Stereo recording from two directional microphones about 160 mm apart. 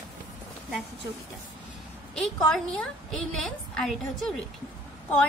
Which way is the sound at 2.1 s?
5° left (ahead or behind).